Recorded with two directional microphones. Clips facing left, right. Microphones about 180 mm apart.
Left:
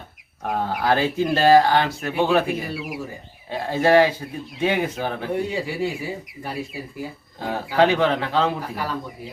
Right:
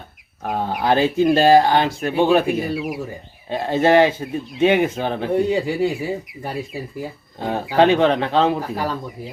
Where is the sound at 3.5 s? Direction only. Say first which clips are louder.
Right 2 dB; 25° right (ahead or behind).